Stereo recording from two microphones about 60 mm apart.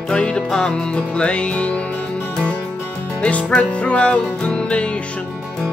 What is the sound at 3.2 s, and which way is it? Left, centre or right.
Music, centre.